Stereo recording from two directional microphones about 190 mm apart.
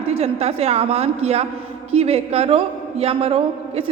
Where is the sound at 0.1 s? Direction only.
30° right (ahead or behind).